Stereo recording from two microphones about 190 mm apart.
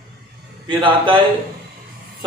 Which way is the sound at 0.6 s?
25° right (ahead or behind).